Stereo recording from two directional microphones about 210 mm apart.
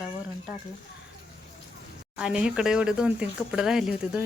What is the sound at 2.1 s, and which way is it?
Speech, 5° right (ahead or behind).